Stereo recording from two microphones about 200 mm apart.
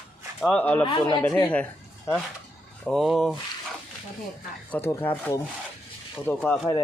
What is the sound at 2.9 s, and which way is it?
Speech, centre (ahead or behind).